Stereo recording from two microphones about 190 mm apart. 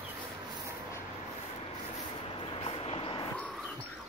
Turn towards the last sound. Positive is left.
turn(degrees=30)  # may be behind; listen again after turning